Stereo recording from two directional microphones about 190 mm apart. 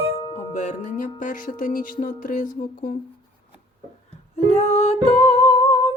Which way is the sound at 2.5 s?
45° left (ahead or behind).